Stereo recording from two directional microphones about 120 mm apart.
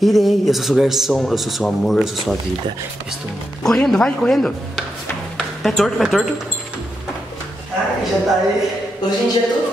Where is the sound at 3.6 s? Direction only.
5° left (ahead or behind).